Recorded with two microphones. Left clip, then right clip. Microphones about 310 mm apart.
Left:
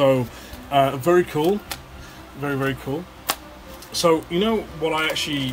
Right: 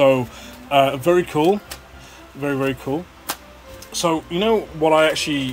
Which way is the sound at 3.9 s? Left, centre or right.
Centre.